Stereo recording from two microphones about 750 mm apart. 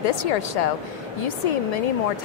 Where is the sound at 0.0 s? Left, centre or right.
Left.